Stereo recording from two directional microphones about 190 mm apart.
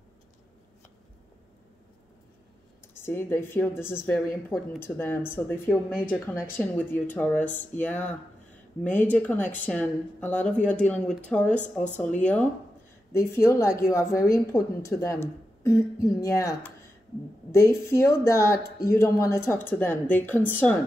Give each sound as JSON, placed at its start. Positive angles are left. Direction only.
{"t": 3.0, "sound": "a woman's voice", "side_deg": 10}